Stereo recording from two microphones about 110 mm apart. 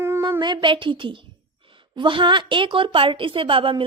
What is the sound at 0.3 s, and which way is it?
A woman's voice, 45° right (ahead or behind).